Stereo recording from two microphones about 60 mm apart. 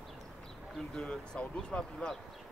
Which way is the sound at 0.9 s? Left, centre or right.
Centre.